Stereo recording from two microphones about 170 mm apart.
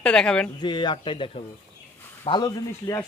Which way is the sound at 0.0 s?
5° left (ahead or behind).